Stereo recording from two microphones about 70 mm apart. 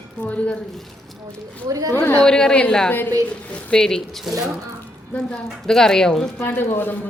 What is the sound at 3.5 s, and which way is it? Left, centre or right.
Speech, centre.